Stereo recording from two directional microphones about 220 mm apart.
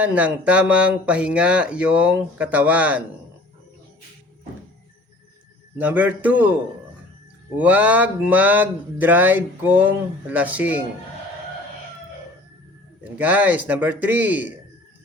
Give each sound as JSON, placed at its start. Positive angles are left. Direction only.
{"t": 0.0, "sound": "speech", "side_deg": -5}
{"t": 5.7, "sound": "speech", "side_deg": -10}
{"t": 7.5, "sound": "speech", "side_deg": -5}
{"t": 13.1, "sound": "speech", "side_deg": -5}